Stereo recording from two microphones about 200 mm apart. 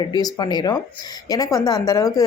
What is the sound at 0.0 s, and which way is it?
A woman's voice, 20° left (ahead or behind).